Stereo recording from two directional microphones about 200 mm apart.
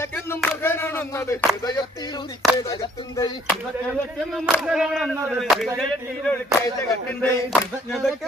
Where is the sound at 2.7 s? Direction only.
20° left (ahead or behind).